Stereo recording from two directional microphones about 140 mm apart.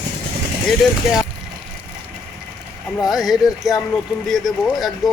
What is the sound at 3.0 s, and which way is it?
Speech, centre (ahead or behind).